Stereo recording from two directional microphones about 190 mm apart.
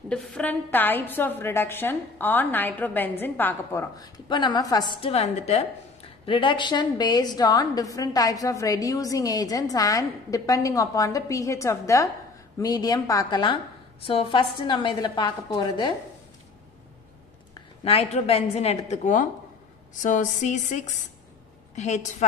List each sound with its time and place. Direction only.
0.1 s a woman's voice: 5° left (ahead or behind); by 15.9 s 20° left (ahead or behind)
17.8 s a woman's voice: 30° left (ahead or behind)